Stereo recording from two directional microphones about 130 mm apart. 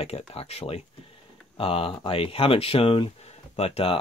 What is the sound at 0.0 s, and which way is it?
Speech, 50° left (ahead or behind).